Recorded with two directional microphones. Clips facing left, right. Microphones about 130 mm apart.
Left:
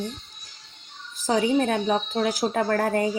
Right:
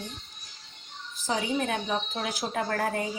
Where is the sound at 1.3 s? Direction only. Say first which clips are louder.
Left 7 dB; 40° left (ahead or behind).